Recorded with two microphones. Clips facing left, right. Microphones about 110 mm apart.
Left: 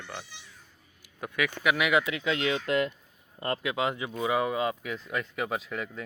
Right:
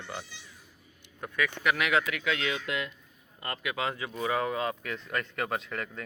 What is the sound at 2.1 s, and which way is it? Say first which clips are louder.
Speech: left 3 dB; 25° left (ahead or behind).